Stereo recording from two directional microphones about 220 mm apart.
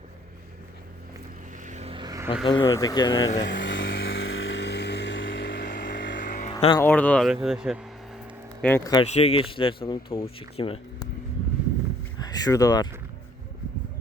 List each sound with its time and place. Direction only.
1.6 s vehicle: 30° right (ahead or behind)
2.4 s speech: 20° left (ahead or behind)
3.4 s vehicle: 55° left (ahead or behind)
6.1 s music: 40° left (ahead or behind)
6.5 s music: 20° left (ahead or behind)
6.7 s speech: 10° left (ahead or behind)
7.4 s vehicle: 5° right (ahead or behind)
8.6 s speech: 10° left (ahead or behind)
9.1 s speech: 25° left (ahead or behind)
12.2 s speech: 15° left (ahead or behind)